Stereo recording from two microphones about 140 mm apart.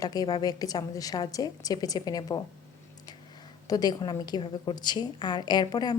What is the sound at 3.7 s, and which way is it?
A woman's voice, 30° left (ahead or behind).